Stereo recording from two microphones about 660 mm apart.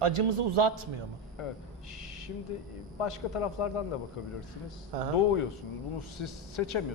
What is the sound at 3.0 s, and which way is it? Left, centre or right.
Speech, left.